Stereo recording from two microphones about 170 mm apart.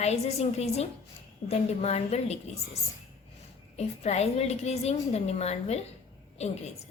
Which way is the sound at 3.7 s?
40° left (ahead or behind).